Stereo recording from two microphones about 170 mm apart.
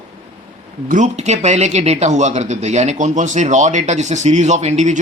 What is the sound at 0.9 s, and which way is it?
Speech, 45° right (ahead or behind).